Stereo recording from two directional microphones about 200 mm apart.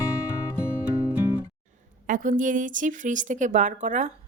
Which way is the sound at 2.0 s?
40° right (ahead or behind).